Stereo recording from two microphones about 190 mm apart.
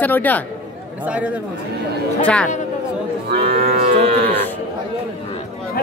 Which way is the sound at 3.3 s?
55° right (ahead or behind).